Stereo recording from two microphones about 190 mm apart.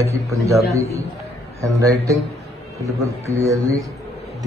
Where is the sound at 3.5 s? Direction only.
15° right (ahead or behind).